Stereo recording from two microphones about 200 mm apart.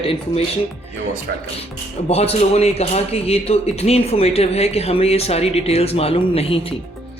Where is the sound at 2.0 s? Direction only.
30° left (ahead or behind).